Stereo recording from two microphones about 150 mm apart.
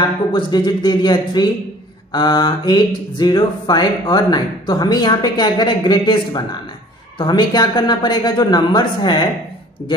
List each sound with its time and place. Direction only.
0.0 s speech: 30° left (ahead or behind)